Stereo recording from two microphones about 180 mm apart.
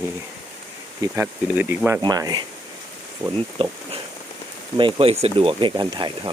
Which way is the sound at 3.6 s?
30° right (ahead or behind).